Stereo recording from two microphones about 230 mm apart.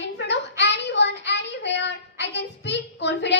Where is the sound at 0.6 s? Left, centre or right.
Left.